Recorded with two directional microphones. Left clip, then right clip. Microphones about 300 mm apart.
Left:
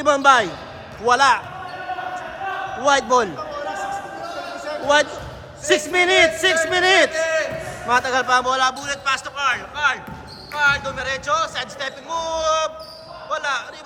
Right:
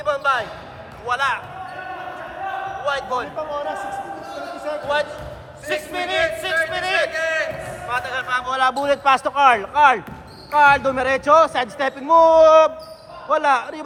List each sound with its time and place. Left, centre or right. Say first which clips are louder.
0.0 s a man's voice: left 6 dB; left
2.8 s a man's voice: left 8 dB; left
5.6 s a man's voice: left 7 dB; left
7.1 s a sound: left 1 dB; centre
8.5 s a man's voice: right 1 dB; centre
8.8 s a man's voice: right 6 dB; centre